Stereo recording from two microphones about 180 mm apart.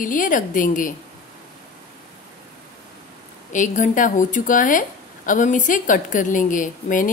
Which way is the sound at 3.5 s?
45° left (ahead or behind).